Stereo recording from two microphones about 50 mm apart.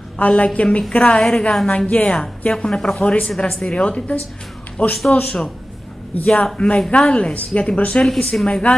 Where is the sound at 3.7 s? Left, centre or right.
Left.